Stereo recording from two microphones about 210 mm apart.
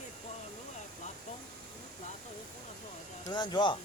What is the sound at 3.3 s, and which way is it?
Speech, 20° left (ahead or behind).